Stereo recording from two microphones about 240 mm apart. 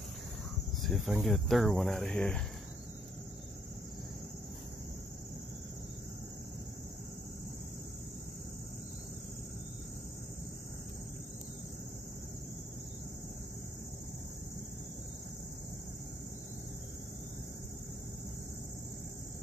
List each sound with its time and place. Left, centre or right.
0.8 s speech: centre